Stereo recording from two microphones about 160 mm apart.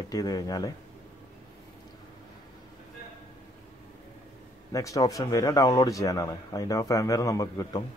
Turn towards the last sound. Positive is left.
turn(degrees=20)  # may be behind; listen again after turning